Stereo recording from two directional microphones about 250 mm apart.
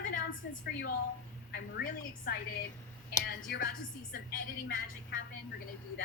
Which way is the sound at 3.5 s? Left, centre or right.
Left.